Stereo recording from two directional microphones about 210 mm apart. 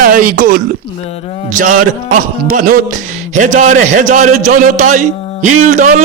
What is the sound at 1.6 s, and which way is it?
A man's voice, 40° right (ahead or behind).